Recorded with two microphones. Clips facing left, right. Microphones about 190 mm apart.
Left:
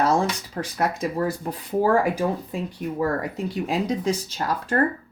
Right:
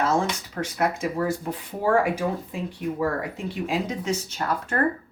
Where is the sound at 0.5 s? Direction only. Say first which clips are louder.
Even; 35° left (ahead or behind).